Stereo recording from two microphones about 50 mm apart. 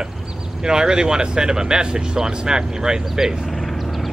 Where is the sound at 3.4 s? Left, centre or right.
Centre.